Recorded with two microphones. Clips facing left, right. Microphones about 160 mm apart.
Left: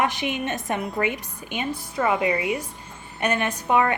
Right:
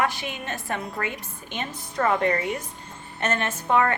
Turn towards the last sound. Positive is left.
turn(degrees=15)  # may be behind; listen again after turning